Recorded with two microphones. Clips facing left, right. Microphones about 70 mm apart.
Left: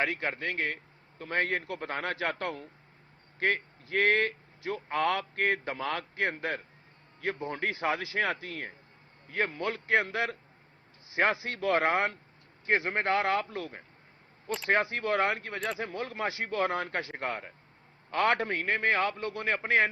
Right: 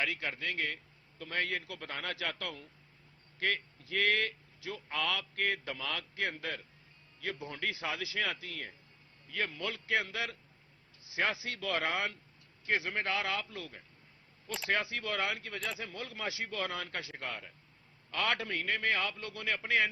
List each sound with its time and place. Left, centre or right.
0.0 s a man's voice: left